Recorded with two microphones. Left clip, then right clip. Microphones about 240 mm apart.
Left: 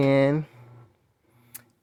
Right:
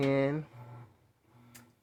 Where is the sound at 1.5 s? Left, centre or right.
Left.